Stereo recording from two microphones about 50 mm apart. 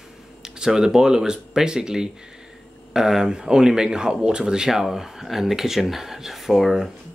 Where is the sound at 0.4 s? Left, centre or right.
Centre.